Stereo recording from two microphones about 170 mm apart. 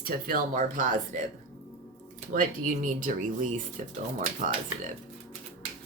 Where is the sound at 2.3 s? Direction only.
55° right (ahead or behind).